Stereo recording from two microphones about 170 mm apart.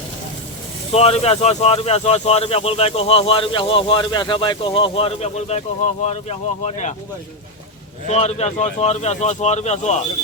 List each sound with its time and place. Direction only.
0.9 s speech: 35° left (ahead or behind)
8.0 s speech: 40° left (ahead or behind)